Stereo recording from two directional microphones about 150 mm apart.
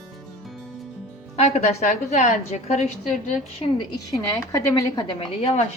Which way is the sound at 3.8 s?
25° left (ahead or behind).